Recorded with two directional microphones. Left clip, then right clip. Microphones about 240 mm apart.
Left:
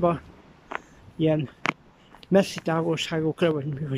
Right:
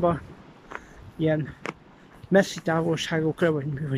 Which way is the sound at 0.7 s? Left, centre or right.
Centre.